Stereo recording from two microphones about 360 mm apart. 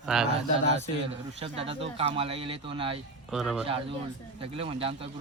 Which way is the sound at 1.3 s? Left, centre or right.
Centre.